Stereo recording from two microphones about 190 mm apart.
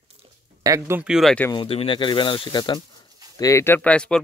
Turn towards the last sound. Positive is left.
turn(degrees=5)  # may be behind; listen again after turning